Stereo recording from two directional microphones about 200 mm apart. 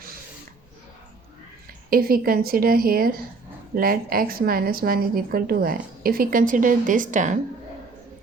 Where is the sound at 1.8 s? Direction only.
45° right (ahead or behind).